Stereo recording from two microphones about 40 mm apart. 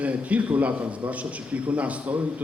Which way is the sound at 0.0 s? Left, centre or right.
Right.